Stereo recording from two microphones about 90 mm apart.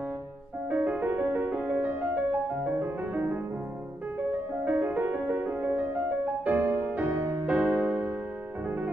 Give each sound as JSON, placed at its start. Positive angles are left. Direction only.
{"t": 0.7, "sound": "music", "side_deg": -15}
{"t": 4.6, "sound": "music", "side_deg": -20}
{"t": 7.2, "sound": "music", "side_deg": -35}
{"t": 7.4, "sound": "music", "side_deg": -15}